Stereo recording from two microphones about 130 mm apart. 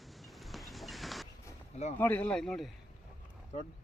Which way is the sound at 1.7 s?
60° left (ahead or behind).